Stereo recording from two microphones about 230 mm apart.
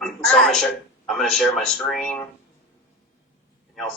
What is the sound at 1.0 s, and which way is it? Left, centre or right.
A man's voice, centre.